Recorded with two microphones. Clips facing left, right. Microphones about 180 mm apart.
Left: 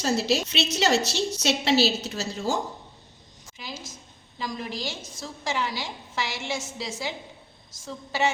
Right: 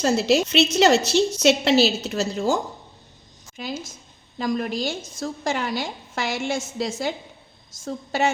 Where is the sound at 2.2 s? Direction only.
45° right (ahead or behind).